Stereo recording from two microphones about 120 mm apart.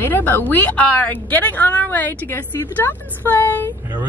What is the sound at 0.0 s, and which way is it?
Speech, 15° left (ahead or behind).